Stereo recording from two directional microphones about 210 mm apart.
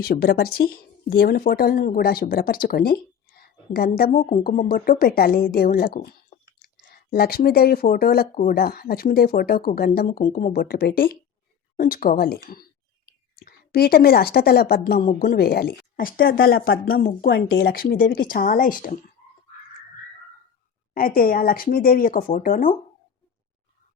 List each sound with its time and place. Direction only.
0.0 s a woman's voice: 45° left (ahead or behind)
13.4 s a woman's voice: 45° left (ahead or behind)
20.9 s a woman's voice: 45° left (ahead or behind)